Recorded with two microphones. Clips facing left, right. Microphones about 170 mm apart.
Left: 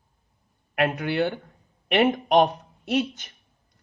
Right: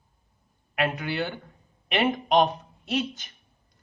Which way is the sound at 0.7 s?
60° left (ahead or behind).